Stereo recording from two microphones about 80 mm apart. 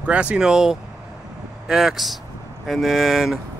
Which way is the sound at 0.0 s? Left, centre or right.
Centre.